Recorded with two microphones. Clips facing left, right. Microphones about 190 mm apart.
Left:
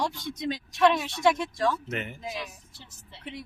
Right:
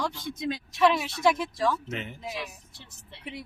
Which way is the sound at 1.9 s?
55° left (ahead or behind).